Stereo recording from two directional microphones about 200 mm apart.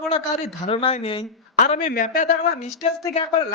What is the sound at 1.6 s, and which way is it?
Speech, 40° left (ahead or behind).